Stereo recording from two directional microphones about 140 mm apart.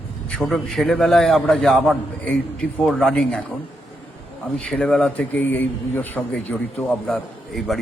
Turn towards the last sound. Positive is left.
turn(degrees=0)  # may be behind; listen again after turning